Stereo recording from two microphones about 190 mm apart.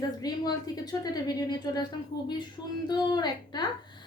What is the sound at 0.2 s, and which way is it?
A woman's voice, 20° left (ahead or behind).